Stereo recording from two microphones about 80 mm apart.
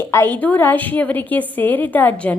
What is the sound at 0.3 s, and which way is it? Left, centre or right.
A woman's voice, left.